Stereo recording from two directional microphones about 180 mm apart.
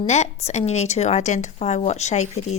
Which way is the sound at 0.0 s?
40° left (ahead or behind).